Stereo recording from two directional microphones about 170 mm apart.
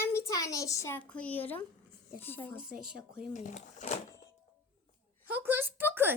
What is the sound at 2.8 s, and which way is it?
Speech, 5° right (ahead or behind).